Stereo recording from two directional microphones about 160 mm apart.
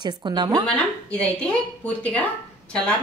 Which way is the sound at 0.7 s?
5° left (ahead or behind).